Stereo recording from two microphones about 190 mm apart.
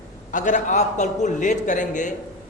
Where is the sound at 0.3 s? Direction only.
40° left (ahead or behind).